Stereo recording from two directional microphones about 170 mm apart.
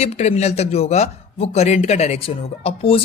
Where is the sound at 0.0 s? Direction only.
40° left (ahead or behind).